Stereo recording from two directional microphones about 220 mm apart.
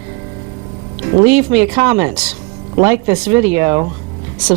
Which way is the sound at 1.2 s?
10° right (ahead or behind).